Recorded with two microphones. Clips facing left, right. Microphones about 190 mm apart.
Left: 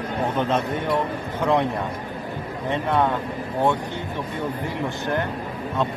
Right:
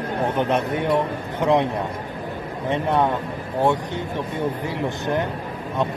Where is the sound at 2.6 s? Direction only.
15° right (ahead or behind).